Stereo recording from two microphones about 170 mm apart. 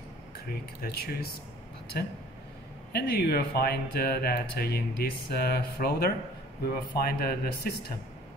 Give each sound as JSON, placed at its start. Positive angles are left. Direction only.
{"t": 0.5, "sound": "speech", "side_deg": 65}